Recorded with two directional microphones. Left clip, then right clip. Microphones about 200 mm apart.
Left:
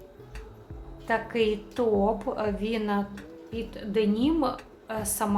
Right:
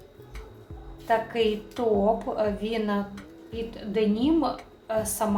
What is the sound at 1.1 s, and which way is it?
A woman's voice, 25° left (ahead or behind).